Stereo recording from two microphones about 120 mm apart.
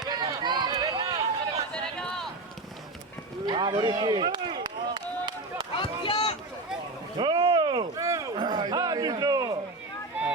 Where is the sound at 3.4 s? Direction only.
40° right (ahead or behind).